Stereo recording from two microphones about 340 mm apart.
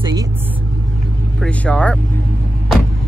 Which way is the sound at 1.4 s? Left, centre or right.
Centre.